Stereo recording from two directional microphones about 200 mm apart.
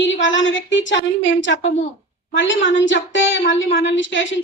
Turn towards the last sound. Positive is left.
turn(degrees=65)  # may be behind; listen again after turning